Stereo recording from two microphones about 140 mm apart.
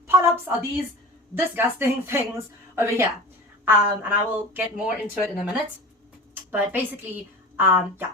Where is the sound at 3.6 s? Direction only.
15° right (ahead or behind).